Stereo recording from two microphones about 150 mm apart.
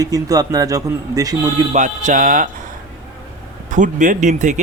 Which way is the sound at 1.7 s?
55° right (ahead or behind).